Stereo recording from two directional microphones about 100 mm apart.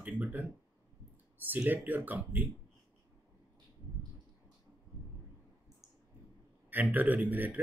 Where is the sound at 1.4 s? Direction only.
20° right (ahead or behind).